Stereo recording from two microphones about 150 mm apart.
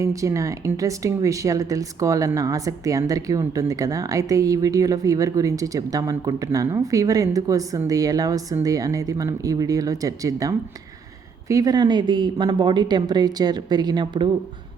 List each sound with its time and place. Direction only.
0.0 s speech: 20° right (ahead or behind)